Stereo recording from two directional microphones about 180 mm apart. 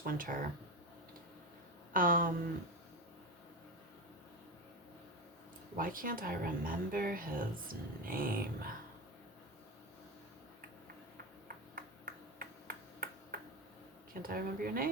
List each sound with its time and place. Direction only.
0.0 s speech: 50° right (ahead or behind)
1.9 s speech: 50° right (ahead or behind)
5.7 s speech: 50° right (ahead or behind)
11.4 s finger snapping: 55° right (ahead or behind)
14.1 s speech: 55° right (ahead or behind)